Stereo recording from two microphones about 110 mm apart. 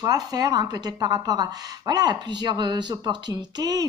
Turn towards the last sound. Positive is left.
turn(degrees=-35)  # may be behind; listen again after turning